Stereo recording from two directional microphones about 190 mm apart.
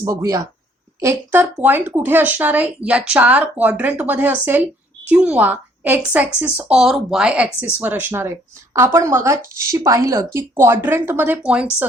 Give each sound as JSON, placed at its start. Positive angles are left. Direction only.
{"t": 0.0, "sound": "speech", "side_deg": -15}